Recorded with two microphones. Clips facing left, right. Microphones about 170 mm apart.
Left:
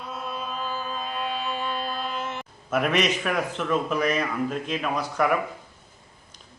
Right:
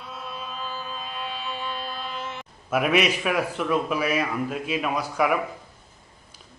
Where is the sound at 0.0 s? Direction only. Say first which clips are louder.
Left 3 dB; 45° left (ahead or behind).